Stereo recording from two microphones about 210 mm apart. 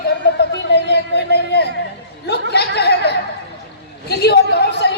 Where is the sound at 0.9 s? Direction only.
55° left (ahead or behind).